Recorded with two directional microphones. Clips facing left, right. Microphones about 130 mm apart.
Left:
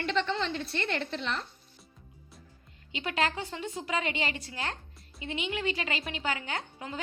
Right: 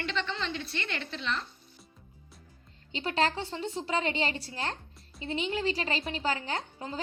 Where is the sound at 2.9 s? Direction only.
30° right (ahead or behind).